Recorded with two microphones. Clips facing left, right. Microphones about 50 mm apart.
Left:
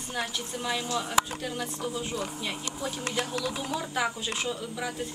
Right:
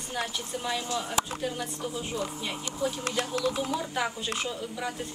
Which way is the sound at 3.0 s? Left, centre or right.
Left.